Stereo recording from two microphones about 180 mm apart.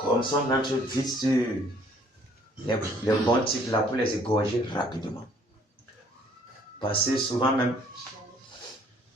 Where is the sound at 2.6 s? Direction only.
25° left (ahead or behind).